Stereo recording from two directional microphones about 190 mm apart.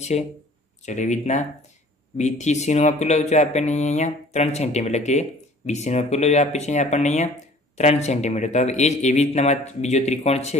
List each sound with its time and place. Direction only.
0.1 s speech: 35° left (ahead or behind)